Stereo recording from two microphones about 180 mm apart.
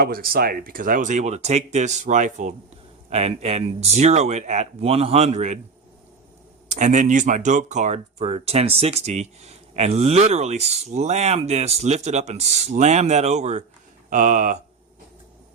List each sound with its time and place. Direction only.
0.0 s speech: 55° right (ahead or behind); by 5.5 s 40° right (ahead or behind)
6.7 s speech: 45° right (ahead or behind)